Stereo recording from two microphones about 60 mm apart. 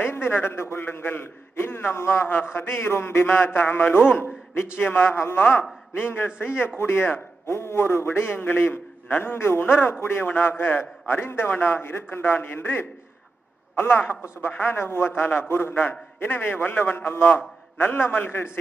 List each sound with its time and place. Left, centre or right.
0.0 s a man's voice: left
5.4 s a man's voice: left